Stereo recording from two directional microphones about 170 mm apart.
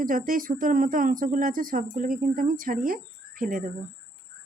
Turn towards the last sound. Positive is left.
turn(degrees=-55)  # may be behind; listen again after turning